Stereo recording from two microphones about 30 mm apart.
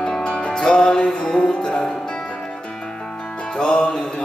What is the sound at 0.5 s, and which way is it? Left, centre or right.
Music, left.